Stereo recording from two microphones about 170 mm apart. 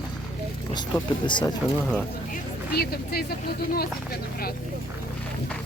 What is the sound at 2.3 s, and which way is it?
Speech, 65° left (ahead or behind).